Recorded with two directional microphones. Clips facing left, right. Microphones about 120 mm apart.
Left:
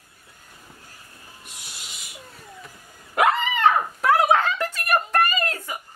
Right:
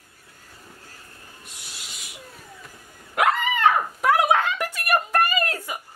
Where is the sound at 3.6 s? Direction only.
15° right (ahead or behind).